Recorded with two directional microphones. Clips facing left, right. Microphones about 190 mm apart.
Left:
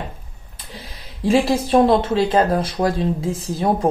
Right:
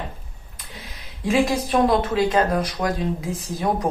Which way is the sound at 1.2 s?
30° left (ahead or behind).